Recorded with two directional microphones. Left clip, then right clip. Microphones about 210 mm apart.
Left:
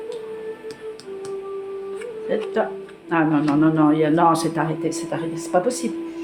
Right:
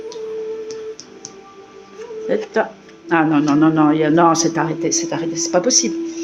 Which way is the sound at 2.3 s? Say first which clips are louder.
Right 3 dB; 45° right (ahead or behind).